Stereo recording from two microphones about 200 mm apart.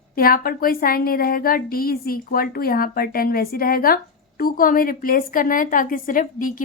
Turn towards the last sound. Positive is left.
turn(degrees=45)  # may be behind; listen again after turning